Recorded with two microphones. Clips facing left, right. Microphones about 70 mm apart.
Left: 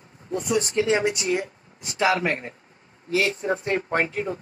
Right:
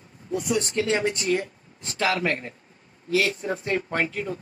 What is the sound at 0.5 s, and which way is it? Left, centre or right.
Speech, centre.